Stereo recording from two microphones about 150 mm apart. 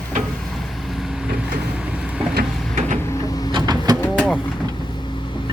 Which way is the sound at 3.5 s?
25° right (ahead or behind).